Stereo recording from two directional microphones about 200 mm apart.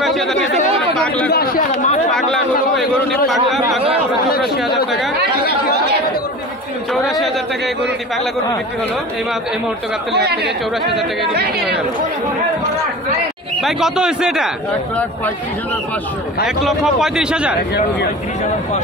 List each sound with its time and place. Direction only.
0.0 s a sound: centre (ahead or behind)
0.9 s a man's voice: 5° left (ahead or behind)
1.3 s speech: 50° left (ahead or behind)
2.0 s chatter: centre (ahead or behind)
6.9 s a man's voice: centre (ahead or behind)
10.1 s speech: 55° right (ahead or behind)
13.6 s a man's voice: centre (ahead or behind)
16.4 s a man's voice: centre (ahead or behind)